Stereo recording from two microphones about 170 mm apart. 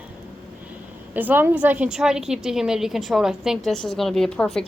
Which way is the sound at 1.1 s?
10° right (ahead or behind).